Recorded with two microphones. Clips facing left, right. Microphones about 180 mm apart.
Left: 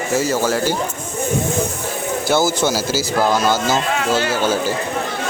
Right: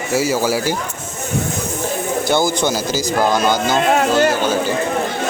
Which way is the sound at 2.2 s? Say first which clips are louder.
Left 1 dB; 5° left (ahead or behind).